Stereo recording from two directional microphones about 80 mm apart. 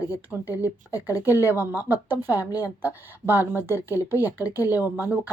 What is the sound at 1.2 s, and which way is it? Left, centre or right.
Speech, right.